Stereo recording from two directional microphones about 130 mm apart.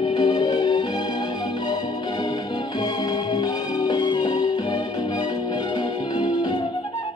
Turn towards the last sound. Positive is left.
turn(degrees=40)  # may be behind; listen again after turning